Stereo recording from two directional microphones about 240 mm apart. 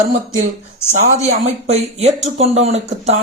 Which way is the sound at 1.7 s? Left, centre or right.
Right.